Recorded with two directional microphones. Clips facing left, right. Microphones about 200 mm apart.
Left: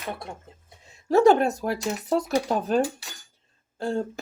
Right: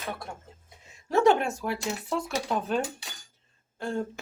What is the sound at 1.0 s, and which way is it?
Speech, 35° left (ahead or behind).